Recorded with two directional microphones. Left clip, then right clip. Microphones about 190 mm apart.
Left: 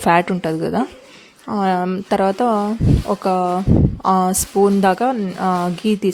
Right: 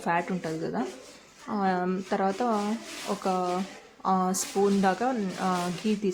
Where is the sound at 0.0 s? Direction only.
50° left (ahead or behind).